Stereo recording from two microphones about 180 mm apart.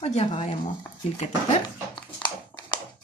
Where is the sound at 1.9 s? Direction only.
25° left (ahead or behind).